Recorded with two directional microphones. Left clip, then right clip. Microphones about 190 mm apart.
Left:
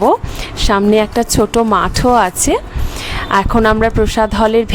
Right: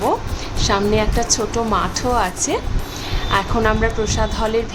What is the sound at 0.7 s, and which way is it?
A woman's voice, 50° left (ahead or behind).